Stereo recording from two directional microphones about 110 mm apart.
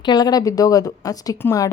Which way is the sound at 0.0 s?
40° left (ahead or behind).